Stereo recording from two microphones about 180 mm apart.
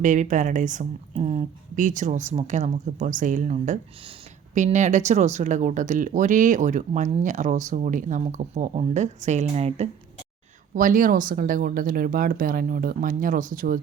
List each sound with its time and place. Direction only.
0.0 s speech: 45° right (ahead or behind)
10.8 s speech: 50° right (ahead or behind)